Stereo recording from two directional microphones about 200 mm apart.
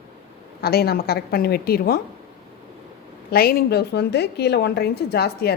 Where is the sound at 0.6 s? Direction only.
50° left (ahead or behind).